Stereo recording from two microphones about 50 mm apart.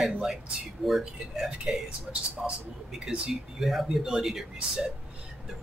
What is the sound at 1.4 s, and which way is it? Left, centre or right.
Speech, centre.